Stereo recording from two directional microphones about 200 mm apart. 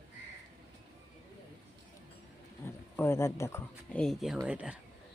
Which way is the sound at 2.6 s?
10° left (ahead or behind).